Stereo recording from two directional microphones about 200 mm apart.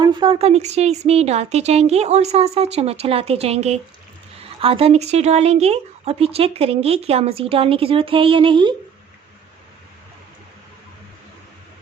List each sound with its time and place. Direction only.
0.0 s speech: 25° right (ahead or behind)